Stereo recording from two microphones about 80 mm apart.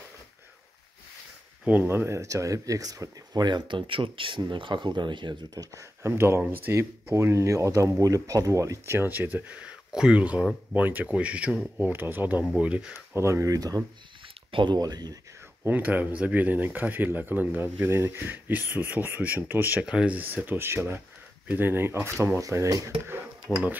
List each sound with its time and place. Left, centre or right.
1.7 s speech: right
3.4 s speech: right
5.5 s speech: right
6.0 s speech: right
9.6 s speech: centre
11.8 s speech: right
13.1 s speech: right
14.5 s speech: right
14.8 s speech: right
15.6 s speech: right
19.8 s speech: centre
20.4 s speech: right
23.4 s speech: centre